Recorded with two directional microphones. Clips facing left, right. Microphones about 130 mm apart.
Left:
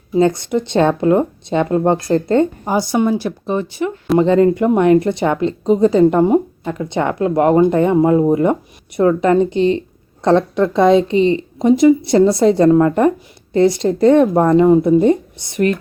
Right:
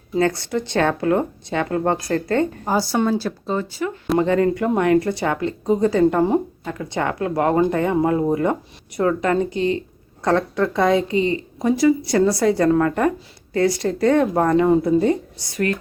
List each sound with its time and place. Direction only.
0.2 s a woman's voice: 20° left (ahead or behind)